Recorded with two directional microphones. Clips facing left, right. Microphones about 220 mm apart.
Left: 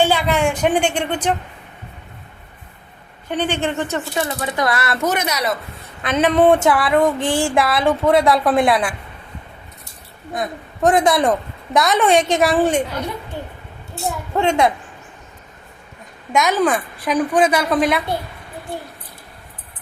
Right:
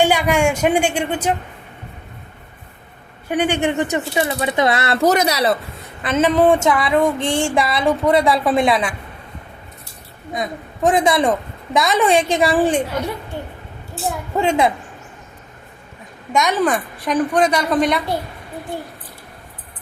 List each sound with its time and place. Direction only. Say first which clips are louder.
0.0 s speech: right 1 dB; 15° right (ahead or behind)
3.2 s speech: right 3 dB; 10° right (ahead or behind)
5.0 s speech: right 6 dB; 35° right (ahead or behind)
6.0 s a woman's voice: even; centre (ahead or behind)
7.3 s music: even; 25° right (ahead or behind)
7.5 s a woman's voice: left 1 dB; centre (ahead or behind)
10.3 s a woman's voice: even; centre (ahead or behind)
13.9 s a woman's voice: even; 5° right (ahead or behind)
16.3 s a woman's voice: left 1 dB; centre (ahead or behind)